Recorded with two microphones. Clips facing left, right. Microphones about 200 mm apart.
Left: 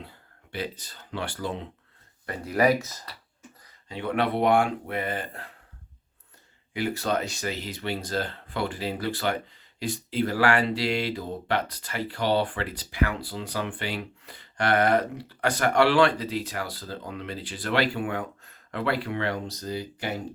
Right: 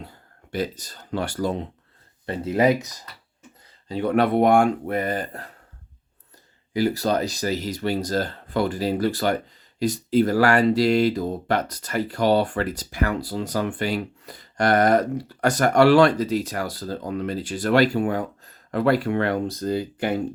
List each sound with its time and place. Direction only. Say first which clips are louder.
0.0 s speech: right 4 dB; 40° right (ahead or behind)
2.2 s speech: right 3 dB; 25° right (ahead or behind)
3.8 s speech: right 6 dB; 40° right (ahead or behind)
6.7 s speech: right 5 dB; 35° right (ahead or behind); by 20.1 s 55° right (ahead or behind)